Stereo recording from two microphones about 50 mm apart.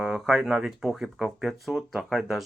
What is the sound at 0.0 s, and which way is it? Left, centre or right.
Speech, centre.